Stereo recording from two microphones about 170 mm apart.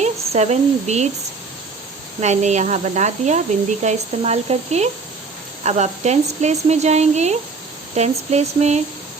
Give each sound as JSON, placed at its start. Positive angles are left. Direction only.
{"t": 0.0, "sound": "speech", "side_deg": -40}
{"t": 2.2, "sound": "speech", "side_deg": -40}